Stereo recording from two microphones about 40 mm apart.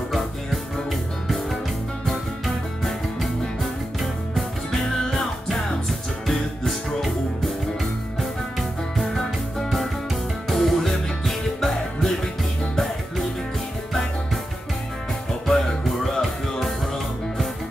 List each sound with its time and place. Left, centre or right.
2.0 s music: centre
15.4 s music: centre